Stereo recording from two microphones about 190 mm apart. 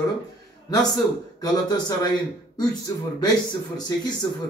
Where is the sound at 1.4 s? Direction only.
20° left (ahead or behind).